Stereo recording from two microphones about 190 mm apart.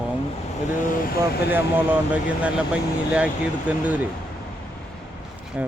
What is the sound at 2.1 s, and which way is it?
Speech, 5° right (ahead or behind).